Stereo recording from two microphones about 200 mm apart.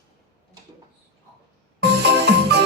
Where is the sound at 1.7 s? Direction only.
55° right (ahead or behind).